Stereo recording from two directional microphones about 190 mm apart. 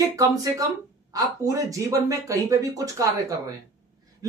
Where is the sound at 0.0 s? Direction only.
20° right (ahead or behind).